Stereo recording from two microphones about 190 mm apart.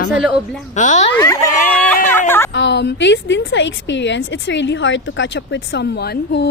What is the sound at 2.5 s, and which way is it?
A woman's voice, 70° left (ahead or behind).